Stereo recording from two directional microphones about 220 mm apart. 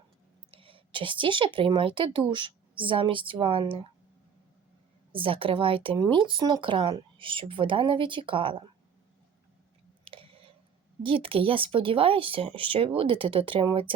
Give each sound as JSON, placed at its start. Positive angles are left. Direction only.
{"t": 0.5, "sound": "a sound", "side_deg": -25}
{"t": 1.5, "sound": "speech", "side_deg": -25}
{"t": 5.1, "sound": "speech", "side_deg": -25}
{"t": 10.0, "sound": "chewing", "side_deg": -25}
{"t": 11.0, "sound": "speech", "side_deg": -25}